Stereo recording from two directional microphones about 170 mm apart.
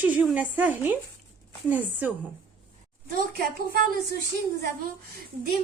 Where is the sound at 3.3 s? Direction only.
60° right (ahead or behind).